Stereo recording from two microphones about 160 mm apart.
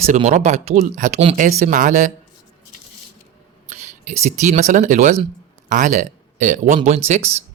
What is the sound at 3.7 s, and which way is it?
Speech, 45° right (ahead or behind).